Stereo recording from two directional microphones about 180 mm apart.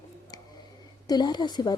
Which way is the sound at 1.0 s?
25° left (ahead or behind).